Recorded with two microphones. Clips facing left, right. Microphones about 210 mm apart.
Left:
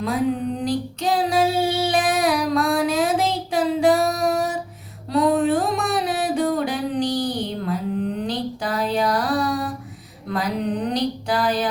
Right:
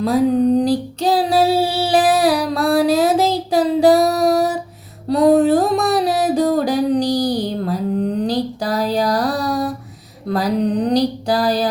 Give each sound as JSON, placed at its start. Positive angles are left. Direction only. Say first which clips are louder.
{"t": 0.0, "sound": "female singing", "louder": "right 7 dB", "side_deg": -35}
{"t": 5.0, "sound": "music", "louder": "right 6 dB", "side_deg": -35}
{"t": 10.2, "sound": "a sound", "louder": "right 6 dB", "side_deg": -35}